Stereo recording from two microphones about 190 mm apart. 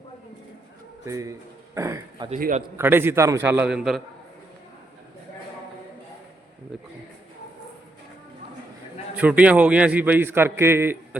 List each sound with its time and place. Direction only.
1.0 s a man's voice: 15° right (ahead or behind)
9.1 s a man's voice: 5° right (ahead or behind)